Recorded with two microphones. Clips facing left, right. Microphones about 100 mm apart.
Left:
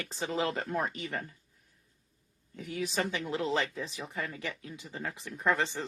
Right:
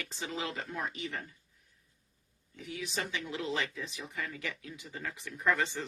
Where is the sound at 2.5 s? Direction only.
45° left (ahead or behind).